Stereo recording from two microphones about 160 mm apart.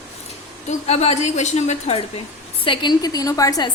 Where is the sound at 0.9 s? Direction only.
40° left (ahead or behind).